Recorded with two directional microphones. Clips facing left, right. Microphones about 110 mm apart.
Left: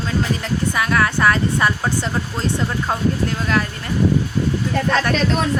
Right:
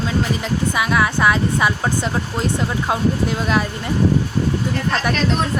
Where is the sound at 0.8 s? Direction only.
10° right (ahead or behind).